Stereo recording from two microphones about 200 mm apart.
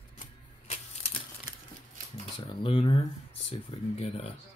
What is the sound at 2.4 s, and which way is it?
Speech, 25° left (ahead or behind).